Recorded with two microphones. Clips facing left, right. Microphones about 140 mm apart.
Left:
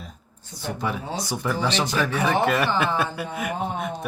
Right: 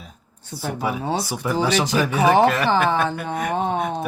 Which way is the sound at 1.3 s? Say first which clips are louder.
Right 2 dB; 10° right (ahead or behind).